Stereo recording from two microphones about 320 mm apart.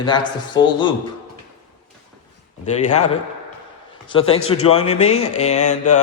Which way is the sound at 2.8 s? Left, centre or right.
Left.